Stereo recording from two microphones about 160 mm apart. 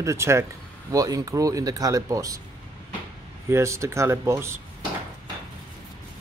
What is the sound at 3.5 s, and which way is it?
Speech, 15° right (ahead or behind).